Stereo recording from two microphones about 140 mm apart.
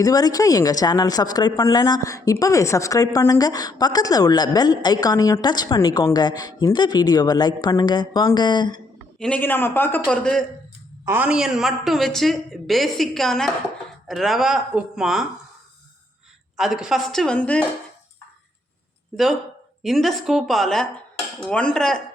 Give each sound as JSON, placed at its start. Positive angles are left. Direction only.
{"t": 0.0, "sound": "a woman's voice", "side_deg": 25}
{"t": 9.1, "sound": "speech", "side_deg": 5}
{"t": 11.0, "sound": "a man's voice", "side_deg": -15}
{"t": 16.6, "sound": "a man's voice", "side_deg": -5}
{"t": 19.1, "sound": "a man's voice", "side_deg": 0}